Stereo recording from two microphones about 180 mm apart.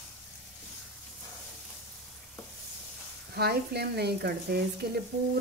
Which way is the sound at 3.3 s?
65° right (ahead or behind).